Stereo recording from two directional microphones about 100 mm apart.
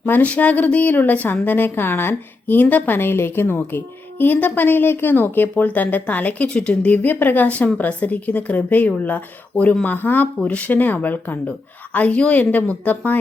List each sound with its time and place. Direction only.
0.0 s speech: 15° left (ahead or behind)